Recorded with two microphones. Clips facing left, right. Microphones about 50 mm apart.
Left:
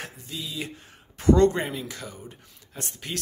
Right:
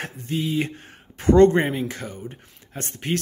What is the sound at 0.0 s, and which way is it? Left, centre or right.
Speech, right.